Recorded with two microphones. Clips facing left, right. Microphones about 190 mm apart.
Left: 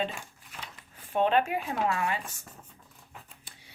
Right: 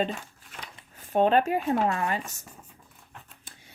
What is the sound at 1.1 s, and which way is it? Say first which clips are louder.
Speech: right 4 dB; 40° right (ahead or behind).